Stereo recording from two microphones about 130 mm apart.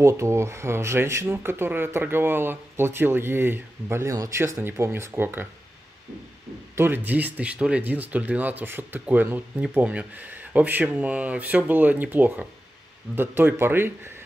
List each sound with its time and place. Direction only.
0.0 s speech: 20° right (ahead or behind)
6.7 s speech: 15° right (ahead or behind)